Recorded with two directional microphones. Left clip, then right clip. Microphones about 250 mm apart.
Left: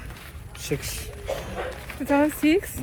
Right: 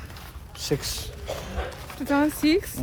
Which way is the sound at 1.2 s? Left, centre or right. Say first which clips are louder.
Left 4 dB; left.